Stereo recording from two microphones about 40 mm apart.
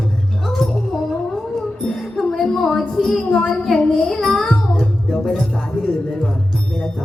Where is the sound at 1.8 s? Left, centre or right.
Centre.